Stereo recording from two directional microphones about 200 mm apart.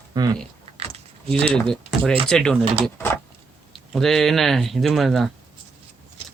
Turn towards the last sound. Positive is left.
turn(degrees=0)  # may be behind; listen again after turning